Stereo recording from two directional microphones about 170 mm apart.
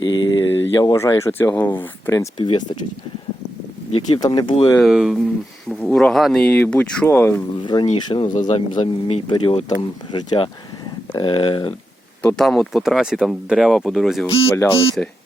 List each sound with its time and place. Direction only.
0.0 s a sound: 25° left (ahead or behind)
0.8 s speech: 20° left (ahead or behind)
2.4 s speech: 25° left (ahead or behind)
4.2 s speech: 25° left (ahead or behind)
4.8 s speech: 5° right (ahead or behind); by 7.4 s 15° left (ahead or behind)
7.6 s speech: 25° left (ahead or behind)
8.4 s a man's voice: 45° left (ahead or behind)
8.7 s speech: 35° left (ahead or behind)
12.2 s speech: 5° left (ahead or behind)
14.3 s speech: 35° left (ahead or behind)